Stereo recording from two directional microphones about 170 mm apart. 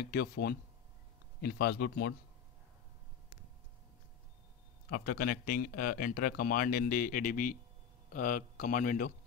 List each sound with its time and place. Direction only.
0.0 s speech: 70° left (ahead or behind)
4.8 s speech: 60° left (ahead or behind)